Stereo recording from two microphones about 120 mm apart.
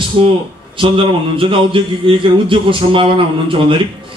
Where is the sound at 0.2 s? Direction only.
45° right (ahead or behind).